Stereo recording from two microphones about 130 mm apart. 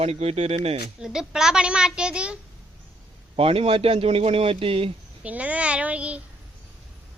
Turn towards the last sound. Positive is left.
turn(degrees=-10)  # may be behind; listen again after turning